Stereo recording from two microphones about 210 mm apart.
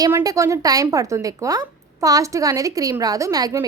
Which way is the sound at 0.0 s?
15° right (ahead or behind).